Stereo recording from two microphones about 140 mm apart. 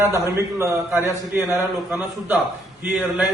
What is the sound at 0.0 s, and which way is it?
A man's voice, 20° right (ahead or behind).